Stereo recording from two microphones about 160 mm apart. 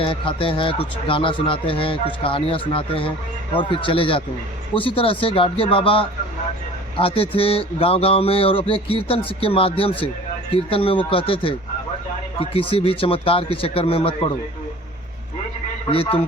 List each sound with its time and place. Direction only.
0.0 s a man's voice: 35° left (ahead or behind)
15.9 s a man's voice: 35° left (ahead or behind)